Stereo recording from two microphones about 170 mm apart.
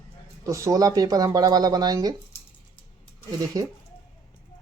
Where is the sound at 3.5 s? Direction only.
20° right (ahead or behind).